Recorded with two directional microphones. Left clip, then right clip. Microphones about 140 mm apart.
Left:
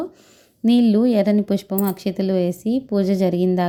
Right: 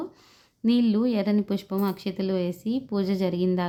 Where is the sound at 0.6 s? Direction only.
25° left (ahead or behind).